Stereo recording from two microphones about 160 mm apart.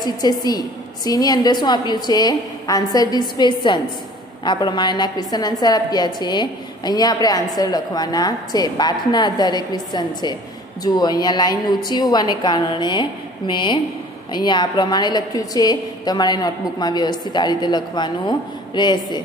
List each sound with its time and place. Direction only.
0.0 s a woman's voice: 25° left (ahead or behind)